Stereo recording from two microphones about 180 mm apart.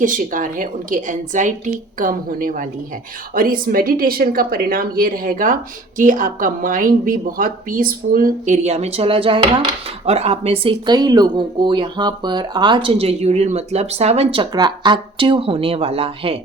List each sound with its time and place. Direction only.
0.0 s speech: 45° right (ahead or behind); by 16.4 s 30° right (ahead or behind)